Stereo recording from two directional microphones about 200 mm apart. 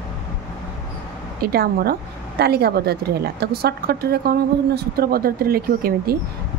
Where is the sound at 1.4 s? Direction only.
50° right (ahead or behind).